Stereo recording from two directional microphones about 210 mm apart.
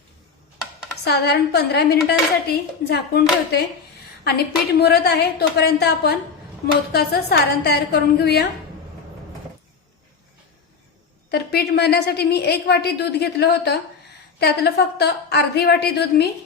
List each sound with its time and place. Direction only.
1.0 s a woman's voice: 50° left (ahead or behind)
11.3 s a woman's voice: 50° left (ahead or behind)